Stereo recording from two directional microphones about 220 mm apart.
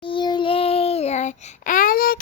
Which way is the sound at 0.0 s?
20° left (ahead or behind).